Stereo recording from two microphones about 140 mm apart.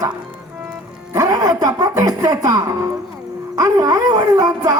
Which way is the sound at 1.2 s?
25° right (ahead or behind).